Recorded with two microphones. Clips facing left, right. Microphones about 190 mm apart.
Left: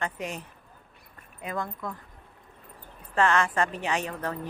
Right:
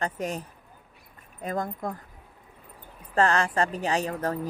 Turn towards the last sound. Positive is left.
turn(degrees=-35)  # may be behind; listen again after turning